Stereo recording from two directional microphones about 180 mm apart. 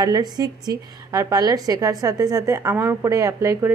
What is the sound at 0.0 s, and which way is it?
A woman's voice, 20° right (ahead or behind).